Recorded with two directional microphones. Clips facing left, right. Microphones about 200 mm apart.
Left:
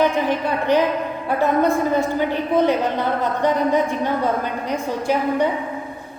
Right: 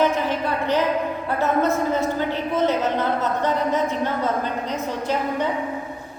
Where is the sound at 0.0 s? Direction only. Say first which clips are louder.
Left 2 dB; 15° left (ahead or behind).